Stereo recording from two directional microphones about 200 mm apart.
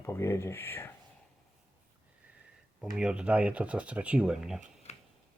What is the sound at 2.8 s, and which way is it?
Speech, 5° right (ahead or behind).